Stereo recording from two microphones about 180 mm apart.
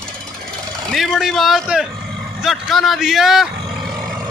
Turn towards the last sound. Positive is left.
turn(degrees=0)  # may be behind; listen again after turning